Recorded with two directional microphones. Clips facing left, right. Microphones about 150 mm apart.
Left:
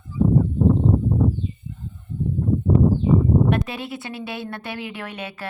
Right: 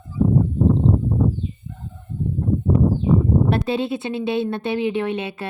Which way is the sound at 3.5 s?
25° right (ahead or behind).